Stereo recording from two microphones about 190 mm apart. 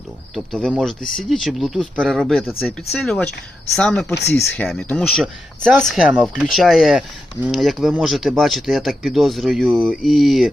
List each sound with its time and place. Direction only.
0.3 s speech: centre (ahead or behind)
4.1 s speech: 60° left (ahead or behind)
4.4 s speech: 5° left (ahead or behind)